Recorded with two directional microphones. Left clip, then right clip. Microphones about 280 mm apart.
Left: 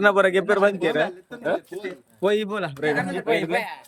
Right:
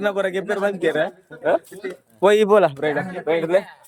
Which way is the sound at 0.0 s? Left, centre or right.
Centre.